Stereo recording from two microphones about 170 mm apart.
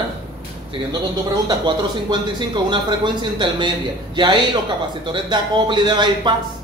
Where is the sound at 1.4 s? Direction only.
25° right (ahead or behind).